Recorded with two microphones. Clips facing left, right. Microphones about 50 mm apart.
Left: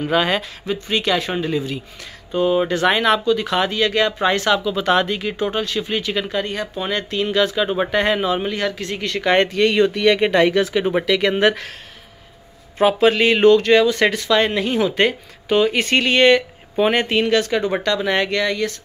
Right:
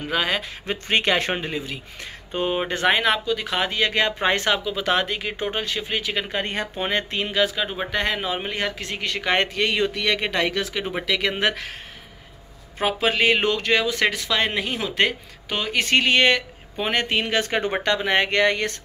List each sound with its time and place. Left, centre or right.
0.0 s speech: centre
0.7 s speech: right
1.3 s speech: right
4.7 s speech: centre
5.4 s speech: centre
6.3 s speech: right
7.3 s speech: centre
7.7 s speech: centre
8.2 s speech: centre
12.7 s speech: centre
17.3 s speech: right
18.4 s speech: right